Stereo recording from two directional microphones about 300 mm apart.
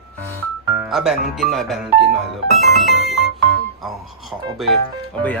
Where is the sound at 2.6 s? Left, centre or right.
Centre.